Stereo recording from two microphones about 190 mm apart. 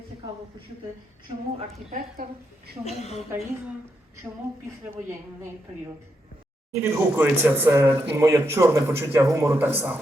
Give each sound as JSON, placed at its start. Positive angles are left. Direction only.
{"t": 1.5, "sound": "a woman's voice", "side_deg": -35}
{"t": 2.8, "sound": "a woman's voice", "side_deg": 35}
{"t": 3.3, "sound": "speech", "side_deg": -10}
{"t": 6.7, "sound": "speech", "side_deg": -10}